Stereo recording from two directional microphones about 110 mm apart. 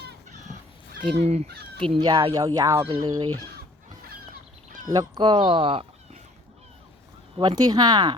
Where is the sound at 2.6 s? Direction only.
30° right (ahead or behind).